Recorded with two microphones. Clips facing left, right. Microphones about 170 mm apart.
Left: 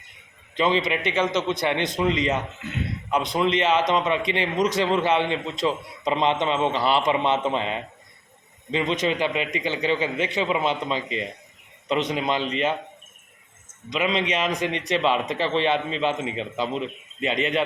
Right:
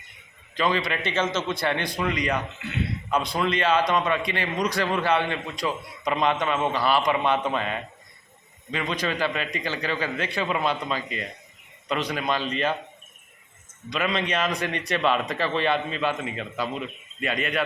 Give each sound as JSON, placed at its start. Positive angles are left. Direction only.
{"t": 0.5, "sound": "a man's voice", "side_deg": 20}
{"t": 13.9, "sound": "a man's voice", "side_deg": 20}